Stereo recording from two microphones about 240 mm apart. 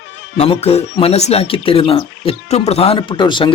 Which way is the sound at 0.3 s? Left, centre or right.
Left.